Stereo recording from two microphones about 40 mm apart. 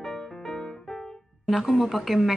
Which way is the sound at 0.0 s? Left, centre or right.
Centre.